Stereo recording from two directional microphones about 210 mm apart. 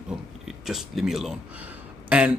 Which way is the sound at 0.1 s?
Centre (ahead or behind).